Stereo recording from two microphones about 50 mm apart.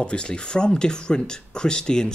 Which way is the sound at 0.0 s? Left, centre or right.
Centre.